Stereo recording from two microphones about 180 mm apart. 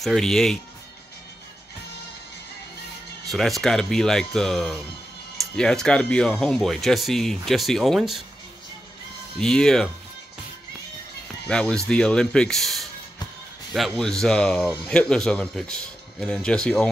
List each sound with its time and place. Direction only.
0.0 s speech: centre (ahead or behind)
3.3 s speech: centre (ahead or behind)
9.4 s speech: 5° left (ahead or behind)
11.4 s speech: 5° left (ahead or behind)